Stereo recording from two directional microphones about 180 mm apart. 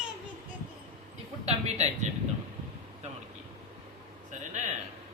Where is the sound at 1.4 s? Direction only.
40° right (ahead or behind).